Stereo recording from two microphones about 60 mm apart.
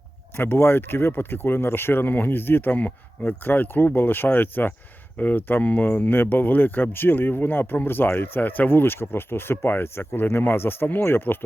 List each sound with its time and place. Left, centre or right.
0.3 s speech: left